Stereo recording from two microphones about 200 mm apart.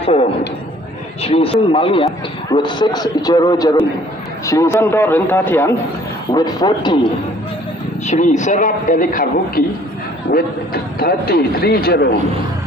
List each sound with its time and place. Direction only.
0.0 s a sound: 30° left (ahead or behind)
1.2 s a man's voice: 30° left (ahead or behind)
8.0 s a man's voice: 35° left (ahead or behind)